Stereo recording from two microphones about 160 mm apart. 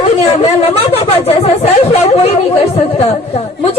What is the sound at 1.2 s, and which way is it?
Chatter, 40° left (ahead or behind).